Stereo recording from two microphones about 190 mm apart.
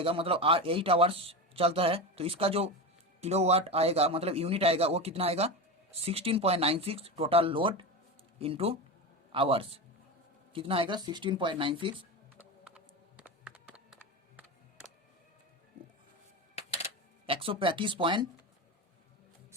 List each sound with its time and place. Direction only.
0.0 s a man's voice: 30° right (ahead or behind)
12.4 s computer keyboard: 5° right (ahead or behind)
13.2 s a sound: 5° right (ahead or behind)
16.6 s music: 30° left (ahead or behind)
17.2 s a man's voice: 30° right (ahead or behind)